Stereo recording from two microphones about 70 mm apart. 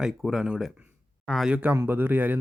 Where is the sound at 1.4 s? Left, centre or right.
Centre.